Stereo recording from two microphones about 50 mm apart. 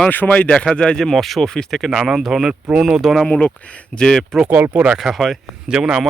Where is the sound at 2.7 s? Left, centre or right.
Centre.